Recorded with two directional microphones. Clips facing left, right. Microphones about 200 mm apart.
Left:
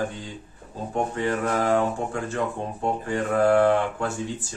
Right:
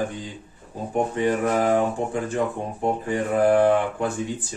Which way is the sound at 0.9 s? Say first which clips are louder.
Right 3 dB; 15° right (ahead or behind).